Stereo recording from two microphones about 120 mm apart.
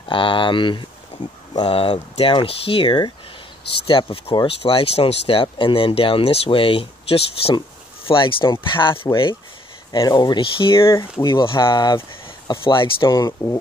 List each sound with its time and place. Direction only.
0.1 s speech: 45° left (ahead or behind)
10.8 s speech: 25° left (ahead or behind)
11.2 s speech: 40° left (ahead or behind)